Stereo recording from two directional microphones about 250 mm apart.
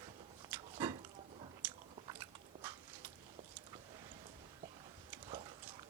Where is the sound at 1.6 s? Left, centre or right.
Centre.